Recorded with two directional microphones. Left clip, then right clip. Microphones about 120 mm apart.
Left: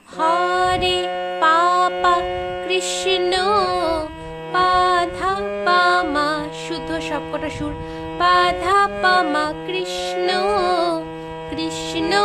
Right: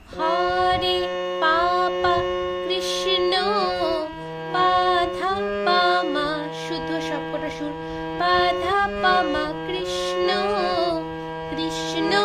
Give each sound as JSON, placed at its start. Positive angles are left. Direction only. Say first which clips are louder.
{"t": 0.2, "sound": "music", "louder": "left 3 dB", "side_deg": 35}
{"t": 8.2, "sound": "music", "louder": "left 4 dB", "side_deg": 35}